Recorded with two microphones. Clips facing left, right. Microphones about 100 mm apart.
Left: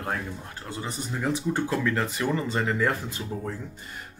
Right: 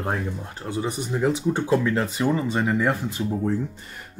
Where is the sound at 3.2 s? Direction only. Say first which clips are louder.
Right 8 dB; 30° right (ahead or behind).